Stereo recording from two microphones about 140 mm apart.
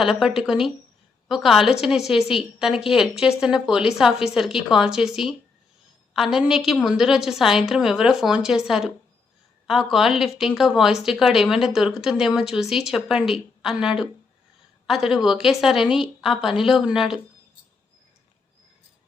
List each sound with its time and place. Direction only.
0.0 s a woman's voice: centre (ahead or behind)